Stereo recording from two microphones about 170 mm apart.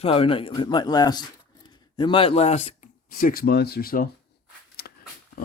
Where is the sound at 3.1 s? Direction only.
60° left (ahead or behind).